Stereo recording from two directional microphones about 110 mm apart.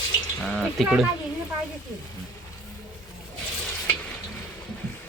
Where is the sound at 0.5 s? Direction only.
5° left (ahead or behind).